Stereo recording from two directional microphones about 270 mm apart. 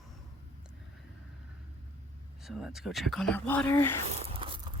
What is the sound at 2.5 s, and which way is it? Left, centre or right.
Speech, centre.